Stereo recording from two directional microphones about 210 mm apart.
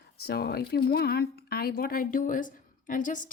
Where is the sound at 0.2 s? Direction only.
50° left (ahead or behind).